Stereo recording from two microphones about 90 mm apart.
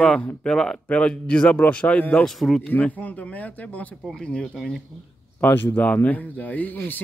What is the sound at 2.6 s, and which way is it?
Speech, 15° left (ahead or behind).